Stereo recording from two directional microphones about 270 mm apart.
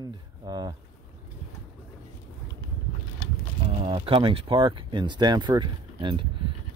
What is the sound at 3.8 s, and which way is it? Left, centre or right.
Speech, centre.